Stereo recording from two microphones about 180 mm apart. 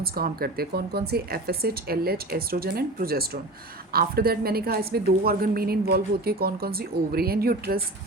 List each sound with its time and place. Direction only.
0.0 s a woman's voice: 55° right (ahead or behind)